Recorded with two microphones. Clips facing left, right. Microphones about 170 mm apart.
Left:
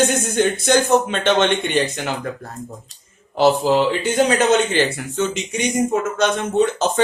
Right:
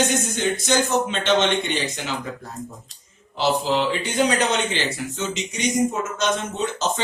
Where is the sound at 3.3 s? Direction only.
50° left (ahead or behind).